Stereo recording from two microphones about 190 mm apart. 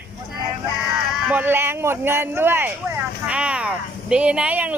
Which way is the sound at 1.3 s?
10° right (ahead or behind).